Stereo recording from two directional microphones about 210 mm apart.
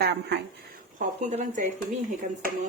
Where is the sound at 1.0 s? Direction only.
40° right (ahead or behind).